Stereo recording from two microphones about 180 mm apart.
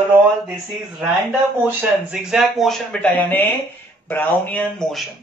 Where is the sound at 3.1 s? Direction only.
10° left (ahead or behind).